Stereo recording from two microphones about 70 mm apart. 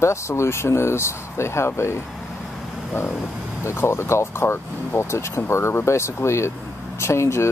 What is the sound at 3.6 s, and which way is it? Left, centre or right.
Speech, left.